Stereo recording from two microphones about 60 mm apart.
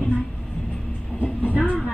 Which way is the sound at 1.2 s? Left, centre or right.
Left.